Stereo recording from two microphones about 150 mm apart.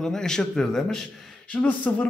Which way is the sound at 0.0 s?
5° left (ahead or behind).